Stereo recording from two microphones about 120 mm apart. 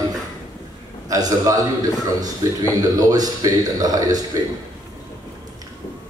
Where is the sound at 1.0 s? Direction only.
30° right (ahead or behind).